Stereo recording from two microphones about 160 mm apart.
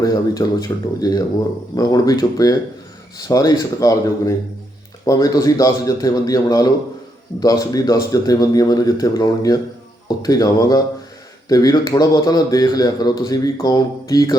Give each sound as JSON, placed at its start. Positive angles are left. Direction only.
{"t": 0.0, "sound": "a man's voice", "side_deg": 20}